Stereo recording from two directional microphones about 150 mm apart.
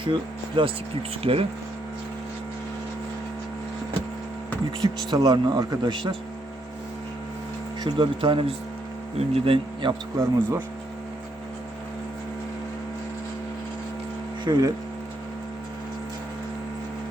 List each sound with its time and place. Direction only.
0.0 s speech: 35° right (ahead or behind)
5.1 s speech: 25° right (ahead or behind)
7.9 s speech: 30° right (ahead or behind)
10.2 s speech: 25° right (ahead or behind)
14.4 s speech: 30° right (ahead or behind)